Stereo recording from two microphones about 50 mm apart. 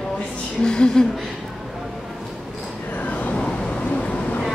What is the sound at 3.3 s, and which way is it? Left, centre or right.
Vehicle, centre.